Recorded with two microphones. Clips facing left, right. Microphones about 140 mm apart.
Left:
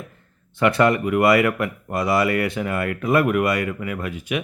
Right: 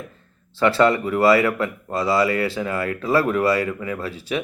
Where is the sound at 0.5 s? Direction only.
20° left (ahead or behind).